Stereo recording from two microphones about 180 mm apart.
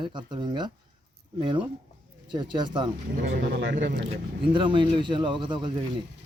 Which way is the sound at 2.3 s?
25° right (ahead or behind).